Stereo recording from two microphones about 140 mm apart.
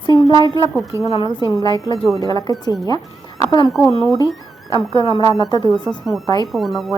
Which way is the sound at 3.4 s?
30° left (ahead or behind).